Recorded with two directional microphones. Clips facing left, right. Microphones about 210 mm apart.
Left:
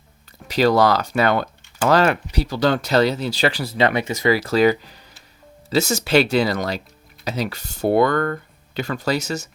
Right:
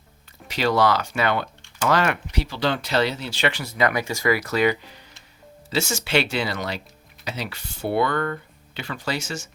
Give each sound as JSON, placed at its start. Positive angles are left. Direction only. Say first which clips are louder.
{"t": 0.4, "sound": "speech", "louder": "left 4 dB", "side_deg": 40}